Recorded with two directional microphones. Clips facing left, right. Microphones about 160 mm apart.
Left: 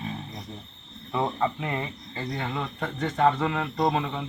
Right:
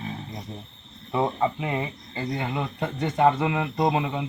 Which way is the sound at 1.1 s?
15° right (ahead or behind).